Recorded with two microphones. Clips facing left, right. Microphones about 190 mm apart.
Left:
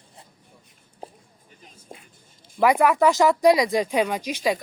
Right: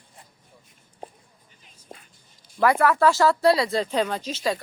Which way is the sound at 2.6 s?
15° left (ahead or behind).